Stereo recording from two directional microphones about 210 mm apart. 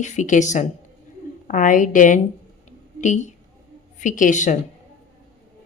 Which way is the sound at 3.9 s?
40° left (ahead or behind).